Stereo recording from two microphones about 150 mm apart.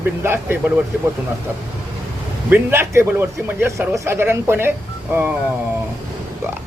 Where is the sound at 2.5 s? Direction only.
15° right (ahead or behind).